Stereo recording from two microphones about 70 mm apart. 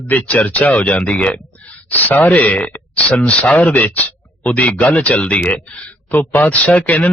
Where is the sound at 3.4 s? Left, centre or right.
Centre.